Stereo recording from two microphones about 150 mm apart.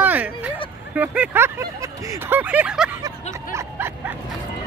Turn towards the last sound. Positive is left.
turn(degrees=-20)  # may be behind; listen again after turning